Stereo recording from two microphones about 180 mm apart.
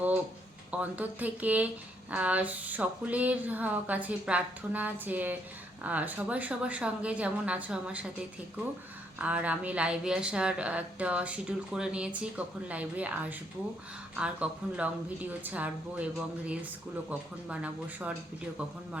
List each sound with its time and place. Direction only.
0.7 s speech: 10° right (ahead or behind)
9.1 s speech: 10° right (ahead or behind)
17.1 s speech: 5° right (ahead or behind)